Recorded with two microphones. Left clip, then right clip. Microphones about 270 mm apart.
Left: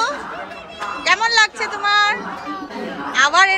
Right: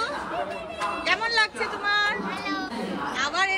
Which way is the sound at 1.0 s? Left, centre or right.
Centre.